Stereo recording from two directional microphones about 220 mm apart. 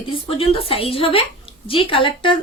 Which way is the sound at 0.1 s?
25° left (ahead or behind).